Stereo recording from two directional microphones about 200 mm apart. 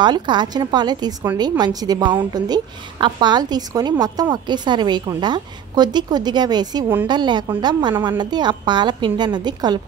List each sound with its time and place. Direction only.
0.0 s a woman's voice: 20° right (ahead or behind)